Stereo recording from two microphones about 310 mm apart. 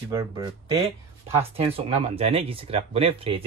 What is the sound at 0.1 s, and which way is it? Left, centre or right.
Speech, centre.